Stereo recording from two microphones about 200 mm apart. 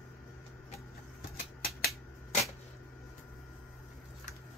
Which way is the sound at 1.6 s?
50° left (ahead or behind).